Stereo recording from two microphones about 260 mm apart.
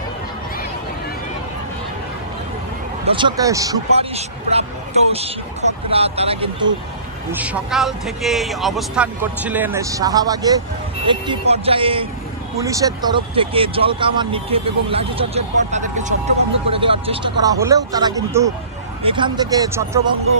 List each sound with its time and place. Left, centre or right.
3.1 s speech: centre
3.9 s speech: right
7.2 s speech: centre